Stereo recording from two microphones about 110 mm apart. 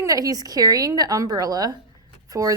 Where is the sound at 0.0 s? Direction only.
30° right (ahead or behind).